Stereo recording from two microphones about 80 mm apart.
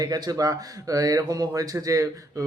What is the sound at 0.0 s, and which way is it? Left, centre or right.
Speech, right.